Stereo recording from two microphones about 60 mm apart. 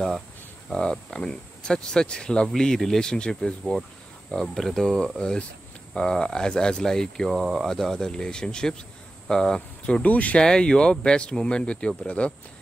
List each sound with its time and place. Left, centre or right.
0.7 s speech: centre
10.0 s speech: left
10.4 s speech: centre